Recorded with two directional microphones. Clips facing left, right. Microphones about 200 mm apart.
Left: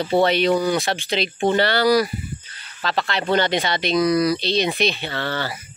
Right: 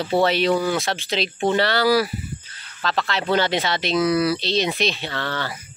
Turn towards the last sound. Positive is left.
turn(degrees=5)  # may be behind; listen again after turning